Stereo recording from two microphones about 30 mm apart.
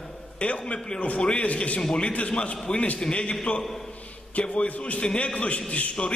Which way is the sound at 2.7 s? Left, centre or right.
Left.